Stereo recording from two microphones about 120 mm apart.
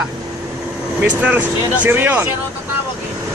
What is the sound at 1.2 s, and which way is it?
Speech, 10° right (ahead or behind).